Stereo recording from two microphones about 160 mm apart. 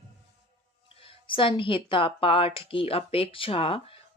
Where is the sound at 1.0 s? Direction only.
35° left (ahead or behind).